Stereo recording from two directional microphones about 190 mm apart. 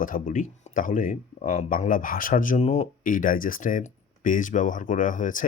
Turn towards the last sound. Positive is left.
turn(degrees=45)  # may be behind; listen again after turning